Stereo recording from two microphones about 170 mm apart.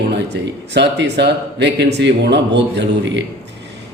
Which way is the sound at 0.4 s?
85° right.